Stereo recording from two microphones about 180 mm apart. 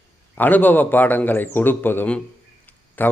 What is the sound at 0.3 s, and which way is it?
A man's voice, 10° left (ahead or behind).